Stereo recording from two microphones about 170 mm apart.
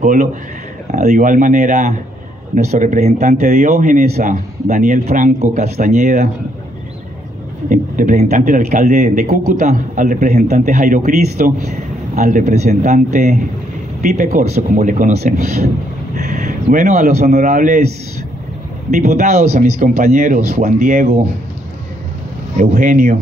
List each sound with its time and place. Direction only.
0.0 s a man's voice: 50° right (ahead or behind)
7.7 s a man's voice: 50° right (ahead or behind)
18.9 s a man's voice: 45° right (ahead or behind)
22.6 s a man's voice: 45° right (ahead or behind)